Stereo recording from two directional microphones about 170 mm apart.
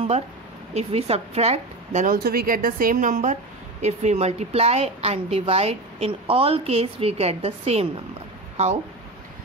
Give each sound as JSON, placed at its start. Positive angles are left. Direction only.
{"t": 0.7, "sound": "a woman's voice", "side_deg": -35}
{"t": 2.1, "sound": "a woman's voice", "side_deg": -60}